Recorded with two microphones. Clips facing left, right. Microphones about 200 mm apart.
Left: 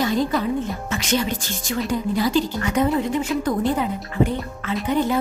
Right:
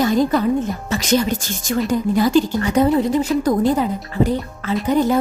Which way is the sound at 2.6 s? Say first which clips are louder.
Right 5 dB; 35° right (ahead or behind).